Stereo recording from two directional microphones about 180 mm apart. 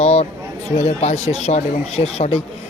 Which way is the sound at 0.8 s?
40° left (ahead or behind).